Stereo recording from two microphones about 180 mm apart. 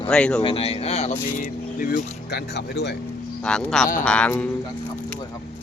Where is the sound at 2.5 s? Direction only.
65° left (ahead or behind).